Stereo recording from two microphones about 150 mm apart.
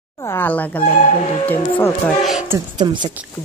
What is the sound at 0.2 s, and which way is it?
A woman's voice, 15° left (ahead or behind).